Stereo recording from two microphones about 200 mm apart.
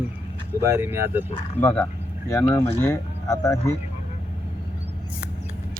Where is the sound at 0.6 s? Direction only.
15° right (ahead or behind).